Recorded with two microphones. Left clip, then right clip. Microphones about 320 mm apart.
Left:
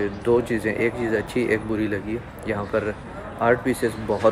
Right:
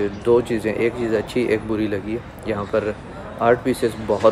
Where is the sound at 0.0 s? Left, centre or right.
Centre.